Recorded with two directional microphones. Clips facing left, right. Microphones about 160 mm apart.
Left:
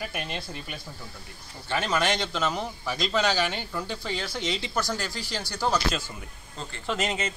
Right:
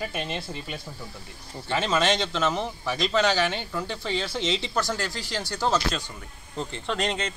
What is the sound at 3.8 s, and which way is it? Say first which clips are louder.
Speech: right 2 dB; 10° left (ahead or behind).